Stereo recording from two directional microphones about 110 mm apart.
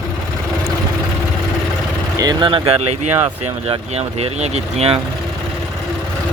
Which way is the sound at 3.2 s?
70° right (ahead or behind).